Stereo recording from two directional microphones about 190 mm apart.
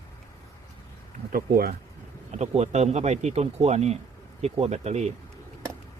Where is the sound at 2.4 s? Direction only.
35° right (ahead or behind).